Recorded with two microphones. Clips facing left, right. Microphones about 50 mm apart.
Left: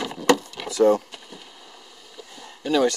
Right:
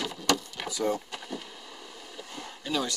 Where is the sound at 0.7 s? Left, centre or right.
Left.